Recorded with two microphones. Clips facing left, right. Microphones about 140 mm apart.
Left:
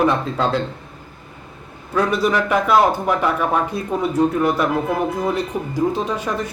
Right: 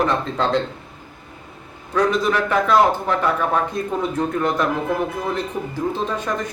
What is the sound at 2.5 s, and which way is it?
Speech, 10° left (ahead or behind).